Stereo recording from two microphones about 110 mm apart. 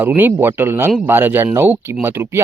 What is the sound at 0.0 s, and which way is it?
Speech, 15° right (ahead or behind).